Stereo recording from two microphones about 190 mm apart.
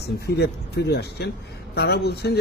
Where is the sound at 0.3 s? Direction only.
60° left (ahead or behind).